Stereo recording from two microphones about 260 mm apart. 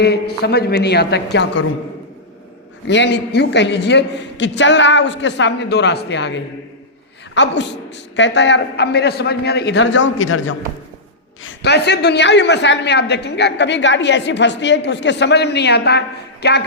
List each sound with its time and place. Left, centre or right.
0.0 s a woman's voice: left
2.8 s a woman's voice: left